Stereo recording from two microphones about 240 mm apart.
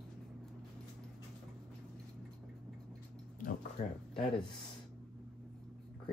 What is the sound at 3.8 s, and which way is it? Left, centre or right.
Speech, left.